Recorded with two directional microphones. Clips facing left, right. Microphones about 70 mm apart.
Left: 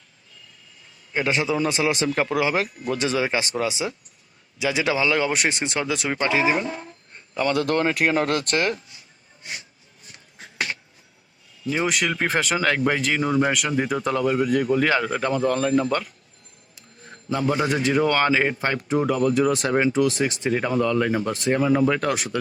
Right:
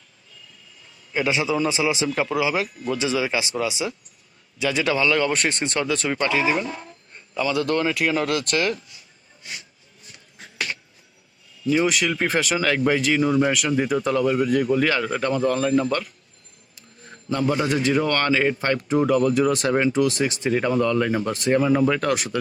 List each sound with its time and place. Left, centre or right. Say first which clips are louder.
1.3 s speech: even; left
1.8 s speech: even; left
2.6 s speech: even; left
3.0 s speech: left 1 dB; left
4.6 s speech: right 1 dB; centre
7.4 s speech: left 1 dB; left
10.1 s a sound: left 1 dB; left
11.9 s speech: right 1 dB; centre
17.2 s speech: even; centre